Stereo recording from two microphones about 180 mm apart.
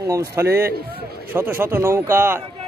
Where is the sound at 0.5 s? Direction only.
60° right (ahead or behind).